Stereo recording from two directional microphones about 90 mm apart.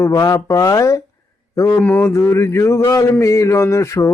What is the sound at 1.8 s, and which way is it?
Mantra, 25° left (ahead or behind).